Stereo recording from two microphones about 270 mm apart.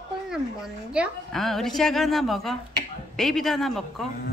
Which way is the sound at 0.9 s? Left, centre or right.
Centre.